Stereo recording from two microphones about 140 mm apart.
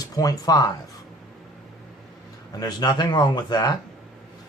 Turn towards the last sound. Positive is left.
turn(degrees=30)  # may be behind; listen again after turning